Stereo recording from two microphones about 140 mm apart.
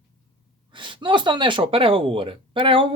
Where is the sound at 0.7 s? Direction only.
35° right (ahead or behind).